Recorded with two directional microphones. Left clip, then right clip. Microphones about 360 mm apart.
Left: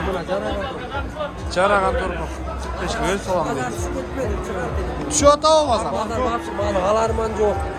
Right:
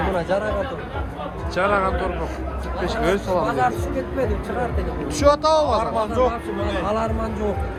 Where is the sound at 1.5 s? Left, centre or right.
Centre.